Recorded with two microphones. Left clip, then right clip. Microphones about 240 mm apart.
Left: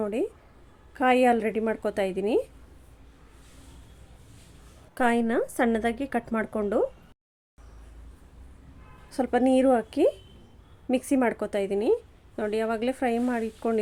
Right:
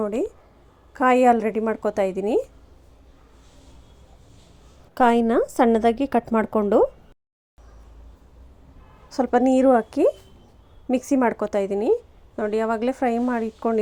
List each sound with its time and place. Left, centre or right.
0.0 s a woman's voice: centre
4.9 s a woman's voice: centre
9.1 s a woman's voice: centre